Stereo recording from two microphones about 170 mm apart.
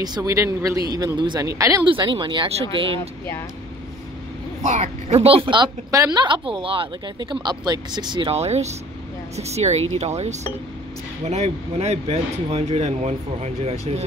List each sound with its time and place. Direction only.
0.0 s a woman's voice: 20° right (ahead or behind)
1.9 s a woman's voice: 30° right (ahead or behind)
4.6 s a woman's voice: 40° right (ahead or behind)